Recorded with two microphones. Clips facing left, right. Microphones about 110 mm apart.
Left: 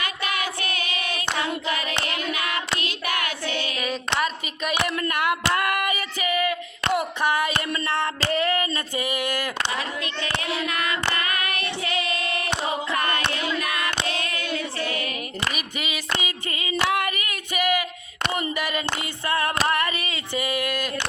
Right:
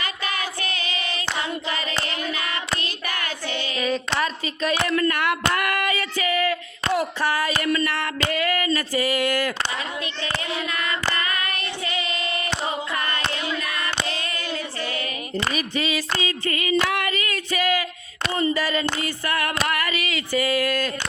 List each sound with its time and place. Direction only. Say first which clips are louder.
0.0 s female singing: left 1 dB; 55° left (ahead or behind)
2.8 s child singing: left 2 dB; 55° left (ahead or behind)
3.8 s speech: right 4 dB; 10° left (ahead or behind)
4.9 s a sound: right 2 dB; 15° left (ahead or behind)
10.7 s female singing: even; 65° left (ahead or behind)
13.0 s a sound: left 2 dB; 60° left (ahead or behind)
14.1 s singing: left 1 dB; 55° left (ahead or behind)
15.8 s female singing: right 1 dB; 15° left (ahead or behind)
18.3 s a sound: right 7 dB; 20° left (ahead or behind)